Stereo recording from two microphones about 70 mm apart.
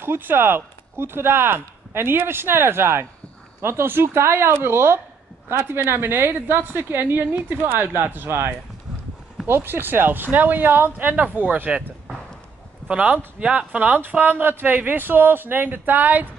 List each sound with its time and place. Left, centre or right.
0.0 s a woman's voice: right
12.8 s speech: centre